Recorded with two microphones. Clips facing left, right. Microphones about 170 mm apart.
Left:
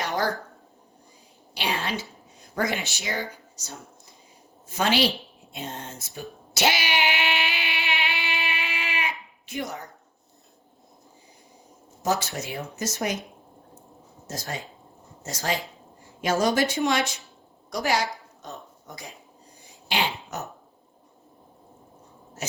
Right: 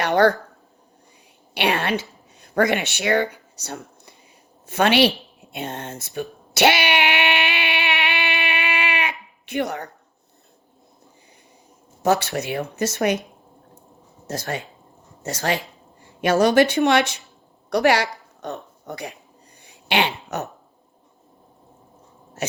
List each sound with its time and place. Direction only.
0.0 s speech: 65° right (ahead or behind)
1.5 s a woman's voice: 65° right (ahead or behind)
6.1 s a sound: 65° right (ahead or behind)
9.5 s speech: 65° right (ahead or behind)
12.0 s speech: 65° right (ahead or behind)
14.3 s speech: 65° right (ahead or behind)
19.6 s a sound: 65° right (ahead or behind)